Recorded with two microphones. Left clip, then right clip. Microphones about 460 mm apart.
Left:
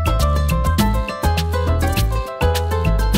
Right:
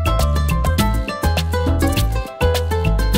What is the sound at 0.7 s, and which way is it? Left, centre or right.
Music, right.